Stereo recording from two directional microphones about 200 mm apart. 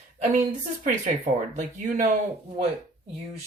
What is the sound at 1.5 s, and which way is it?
Speech, 40° right (ahead or behind).